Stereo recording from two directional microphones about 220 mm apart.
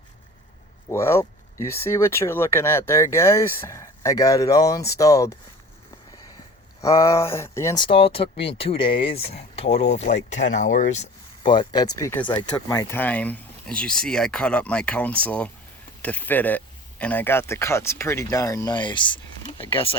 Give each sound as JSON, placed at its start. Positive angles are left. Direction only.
{"t": 0.9, "sound": "speech", "side_deg": 10}
{"t": 6.8, "sound": "speech", "side_deg": 15}